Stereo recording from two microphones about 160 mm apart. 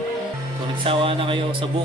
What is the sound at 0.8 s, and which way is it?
Speech, 35° right (ahead or behind).